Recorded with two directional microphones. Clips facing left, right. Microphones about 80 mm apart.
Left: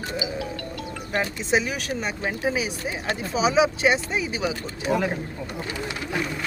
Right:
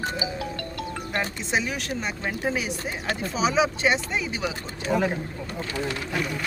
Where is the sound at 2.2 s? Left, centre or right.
Centre.